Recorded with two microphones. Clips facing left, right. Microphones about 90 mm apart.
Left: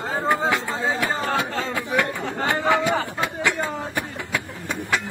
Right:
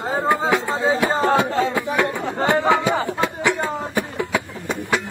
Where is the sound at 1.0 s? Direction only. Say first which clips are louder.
Right 6 dB; 25° right (ahead or behind).